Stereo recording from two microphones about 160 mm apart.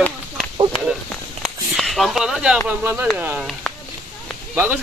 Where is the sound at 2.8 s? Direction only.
15° right (ahead or behind).